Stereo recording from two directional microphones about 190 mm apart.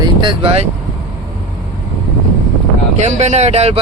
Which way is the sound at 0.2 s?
30° right (ahead or behind).